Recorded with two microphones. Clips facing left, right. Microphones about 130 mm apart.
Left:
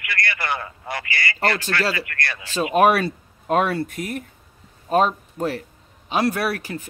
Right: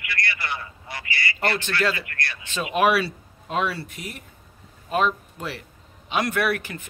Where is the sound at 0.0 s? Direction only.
65° left (ahead or behind).